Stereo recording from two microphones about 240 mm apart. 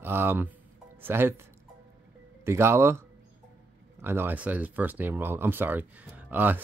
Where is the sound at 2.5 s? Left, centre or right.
Centre.